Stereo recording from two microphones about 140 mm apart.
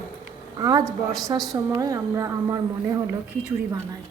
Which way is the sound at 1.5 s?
25° right (ahead or behind).